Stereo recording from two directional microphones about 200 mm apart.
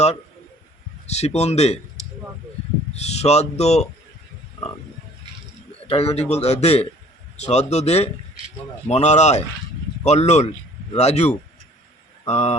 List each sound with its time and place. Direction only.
1.0 s speech: 30° left (ahead or behind)
2.9 s speech: 30° left (ahead or behind)
5.9 s speech: 30° left (ahead or behind)